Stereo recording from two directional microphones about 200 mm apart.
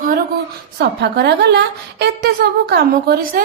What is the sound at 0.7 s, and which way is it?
A woman's voice, 55° right (ahead or behind).